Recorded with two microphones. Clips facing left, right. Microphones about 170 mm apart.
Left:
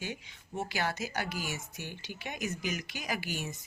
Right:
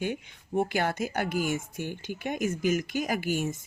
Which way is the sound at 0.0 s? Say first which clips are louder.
Right 9 dB; 55° right (ahead or behind).